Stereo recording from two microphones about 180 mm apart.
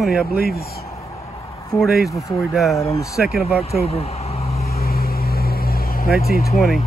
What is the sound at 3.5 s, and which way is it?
Vehicle, 35° left (ahead or behind).